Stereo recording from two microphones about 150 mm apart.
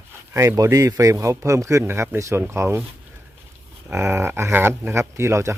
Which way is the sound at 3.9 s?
15° right (ahead or behind).